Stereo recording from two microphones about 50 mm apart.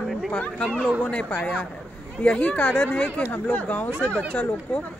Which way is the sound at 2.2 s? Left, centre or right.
Left.